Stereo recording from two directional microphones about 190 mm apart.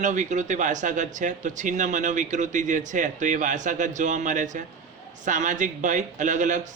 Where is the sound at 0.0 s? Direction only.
40° right (ahead or behind).